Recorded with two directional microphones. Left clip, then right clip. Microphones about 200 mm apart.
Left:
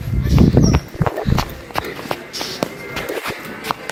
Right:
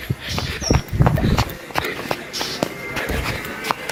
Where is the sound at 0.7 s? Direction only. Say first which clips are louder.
Even; 5° right (ahead or behind).